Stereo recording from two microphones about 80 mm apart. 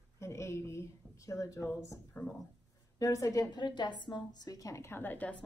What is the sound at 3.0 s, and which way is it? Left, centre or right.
Speech, left.